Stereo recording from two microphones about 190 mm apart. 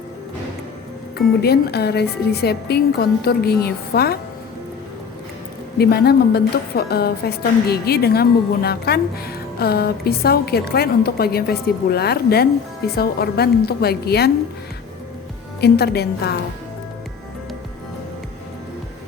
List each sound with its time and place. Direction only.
1.4 s a woman's voice: 55° left (ahead or behind)
5.7 s a woman's voice: 55° left (ahead or behind)
15.6 s a woman's voice: 55° left (ahead or behind)